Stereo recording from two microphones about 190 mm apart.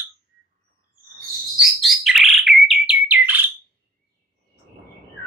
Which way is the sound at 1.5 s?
Centre (ahead or behind).